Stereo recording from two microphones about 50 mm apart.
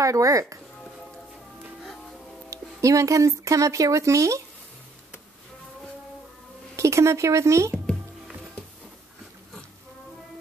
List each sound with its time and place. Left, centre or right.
0.0 s speech: right
2.5 s speech: right
6.8 s speech: right